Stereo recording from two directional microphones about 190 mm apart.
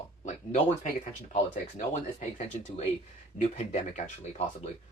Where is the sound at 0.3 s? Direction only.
40° left (ahead or behind).